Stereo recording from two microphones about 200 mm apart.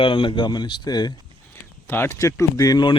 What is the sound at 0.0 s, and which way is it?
Speech, 25° left (ahead or behind).